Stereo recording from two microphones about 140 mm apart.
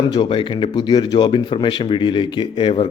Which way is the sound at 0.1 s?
35° left (ahead or behind).